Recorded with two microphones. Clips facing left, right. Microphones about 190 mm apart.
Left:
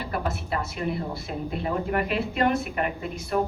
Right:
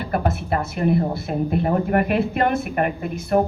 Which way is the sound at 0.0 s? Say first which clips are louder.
Right 6 dB; 55° right (ahead or behind).